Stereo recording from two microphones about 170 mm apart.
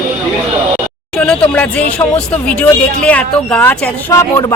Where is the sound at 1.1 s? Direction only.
5° left (ahead or behind).